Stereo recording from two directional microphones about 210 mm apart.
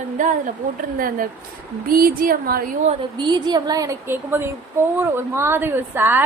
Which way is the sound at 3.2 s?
20° right (ahead or behind).